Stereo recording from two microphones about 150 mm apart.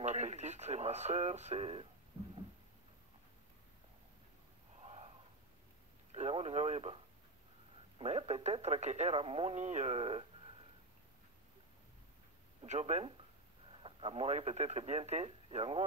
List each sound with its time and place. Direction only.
0.0 s speech: 50° right (ahead or behind)
4.8 s a sound: 40° right (ahead or behind)
6.1 s speech: 45° right (ahead or behind)
8.0 s speech: 45° right (ahead or behind)
12.6 s speech: 50° right (ahead or behind)
13.7 s speech: 35° right (ahead or behind)